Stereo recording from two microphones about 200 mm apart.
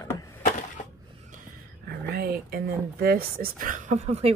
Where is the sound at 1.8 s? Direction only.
50° right (ahead or behind).